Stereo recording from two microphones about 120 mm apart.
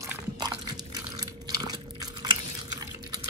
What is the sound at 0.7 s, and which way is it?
Biting, 35° right (ahead or behind).